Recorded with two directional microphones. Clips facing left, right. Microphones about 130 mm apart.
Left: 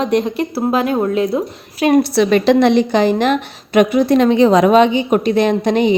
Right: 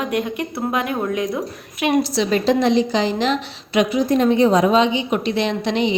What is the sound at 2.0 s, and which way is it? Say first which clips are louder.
A woman's voice: left 6 dB; 60° left (ahead or behind).